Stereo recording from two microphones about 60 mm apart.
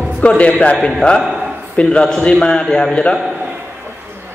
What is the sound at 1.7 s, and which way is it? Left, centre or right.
A man's voice, centre.